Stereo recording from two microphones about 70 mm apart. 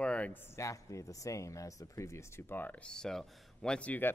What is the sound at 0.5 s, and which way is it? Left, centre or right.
Speech, left.